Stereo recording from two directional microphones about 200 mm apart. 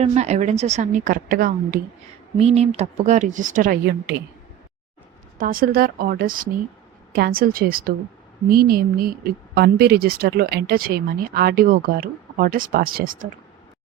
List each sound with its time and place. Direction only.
0.0 s a woman's voice: 35° right (ahead or behind)
2.4 s a woman's voice: 30° right (ahead or behind)
5.4 s speech: 45° right (ahead or behind)